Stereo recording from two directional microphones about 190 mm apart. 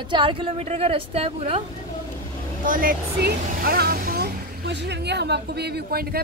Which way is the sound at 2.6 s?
50° right (ahead or behind).